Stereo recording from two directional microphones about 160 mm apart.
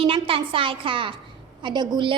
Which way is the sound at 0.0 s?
35° right (ahead or behind).